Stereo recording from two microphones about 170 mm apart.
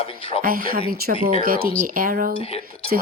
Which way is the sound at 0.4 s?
60° right (ahead or behind).